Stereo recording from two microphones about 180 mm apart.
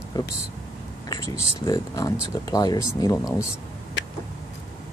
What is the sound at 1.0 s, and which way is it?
Speech, 20° left (ahead or behind).